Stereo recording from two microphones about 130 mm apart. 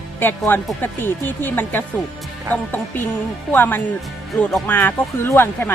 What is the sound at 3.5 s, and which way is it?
Speech, 15° left (ahead or behind).